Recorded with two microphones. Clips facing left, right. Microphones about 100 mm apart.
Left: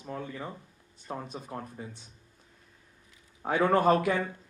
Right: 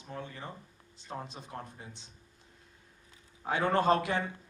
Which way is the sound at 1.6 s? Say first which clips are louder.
Left 4 dB; 25° right (ahead or behind).